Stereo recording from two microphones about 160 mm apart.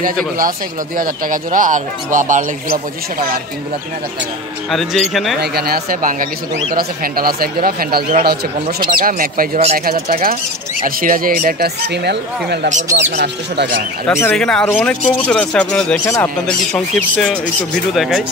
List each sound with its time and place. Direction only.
0.9 s speech: 60° right (ahead or behind)
4.6 s speech: centre (ahead or behind)
5.4 s speech: 75° right (ahead or behind)
12.6 s speech: 50° right (ahead or behind)
13.1 s speech: 90° right
14.0 s speech: 15° left (ahead or behind)
14.3 s speech: 5° left (ahead or behind)